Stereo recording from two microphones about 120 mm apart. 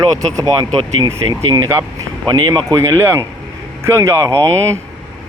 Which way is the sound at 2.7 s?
20° right (ahead or behind).